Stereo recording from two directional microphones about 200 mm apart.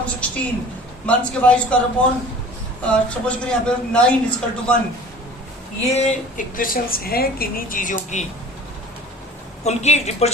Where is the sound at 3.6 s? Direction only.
5° left (ahead or behind).